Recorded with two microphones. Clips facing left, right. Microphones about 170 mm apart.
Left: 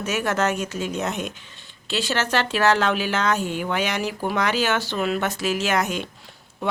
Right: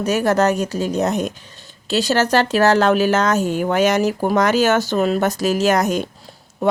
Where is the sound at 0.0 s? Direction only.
35° right (ahead or behind).